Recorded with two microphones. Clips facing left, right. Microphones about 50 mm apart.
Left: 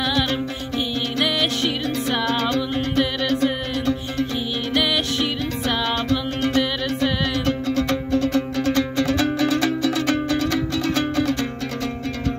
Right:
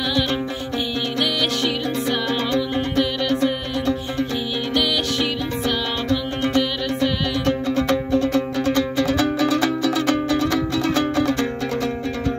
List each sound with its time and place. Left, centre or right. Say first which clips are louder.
1.2 s music: left 1 dB; centre
6.0 s music: even; centre